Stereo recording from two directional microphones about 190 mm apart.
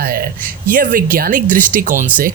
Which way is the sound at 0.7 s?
45° right (ahead or behind).